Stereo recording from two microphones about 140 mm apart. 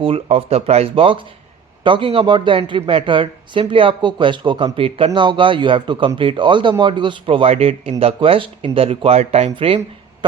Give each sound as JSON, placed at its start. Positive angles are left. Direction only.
{"t": 0.0, "sound": "speech", "side_deg": -40}